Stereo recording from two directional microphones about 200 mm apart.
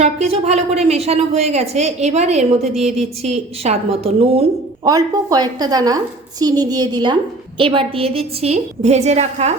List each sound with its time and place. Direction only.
0.0 s a woman's voice: 30° right (ahead or behind)
4.9 s a woman's voice: 20° right (ahead or behind); by 9.5 s 35° right (ahead or behind)